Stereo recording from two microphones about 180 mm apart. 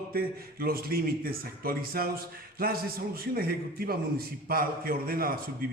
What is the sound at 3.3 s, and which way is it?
A man's voice, 55° right (ahead or behind).